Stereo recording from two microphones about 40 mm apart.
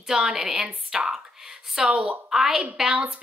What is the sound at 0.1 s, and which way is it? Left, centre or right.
Speech, centre.